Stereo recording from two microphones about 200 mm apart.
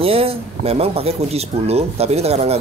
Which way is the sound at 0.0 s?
30° right (ahead or behind).